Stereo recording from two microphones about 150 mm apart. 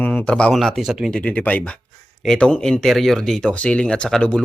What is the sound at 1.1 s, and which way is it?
A man's voice, 10° left (ahead or behind).